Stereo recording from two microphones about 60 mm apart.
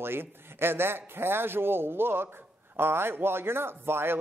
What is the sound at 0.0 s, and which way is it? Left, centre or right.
Speech, right.